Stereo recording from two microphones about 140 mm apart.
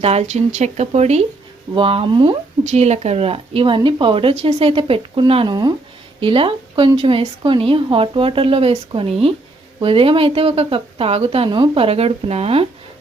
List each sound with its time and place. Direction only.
0.0 s speech: 50° right (ahead or behind)
1.7 s speech: 40° right (ahead or behind)
2.6 s speech: 50° right (ahead or behind)